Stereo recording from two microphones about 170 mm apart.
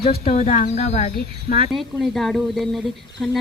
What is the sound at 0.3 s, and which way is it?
Speech, 40° left (ahead or behind).